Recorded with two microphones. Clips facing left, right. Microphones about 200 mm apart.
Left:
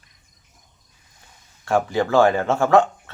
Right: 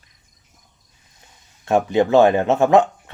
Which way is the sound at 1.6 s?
20° right (ahead or behind).